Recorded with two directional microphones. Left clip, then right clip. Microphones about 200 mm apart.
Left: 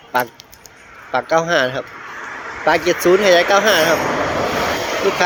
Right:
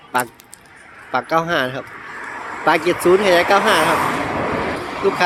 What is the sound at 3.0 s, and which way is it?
Speech, 40° right (ahead or behind).